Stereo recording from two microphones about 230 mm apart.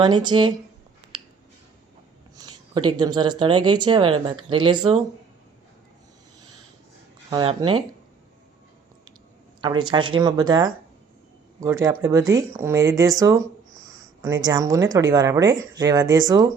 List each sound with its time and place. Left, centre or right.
0.0 s speech: centre
2.3 s speech: centre
7.3 s speech: centre
9.6 s speech: right